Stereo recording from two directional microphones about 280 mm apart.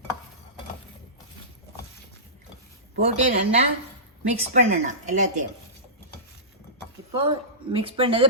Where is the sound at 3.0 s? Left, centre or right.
Right.